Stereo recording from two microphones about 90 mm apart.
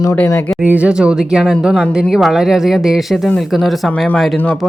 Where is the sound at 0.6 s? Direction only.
15° right (ahead or behind).